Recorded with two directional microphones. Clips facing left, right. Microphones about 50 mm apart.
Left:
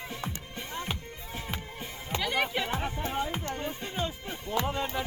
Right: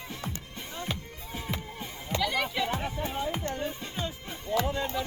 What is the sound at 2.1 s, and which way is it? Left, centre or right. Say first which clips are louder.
Music: even; left.